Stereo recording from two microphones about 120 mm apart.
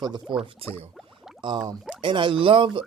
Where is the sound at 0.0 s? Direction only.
35° right (ahead or behind).